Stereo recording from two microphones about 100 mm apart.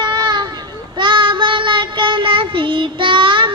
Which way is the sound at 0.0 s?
45° right (ahead or behind).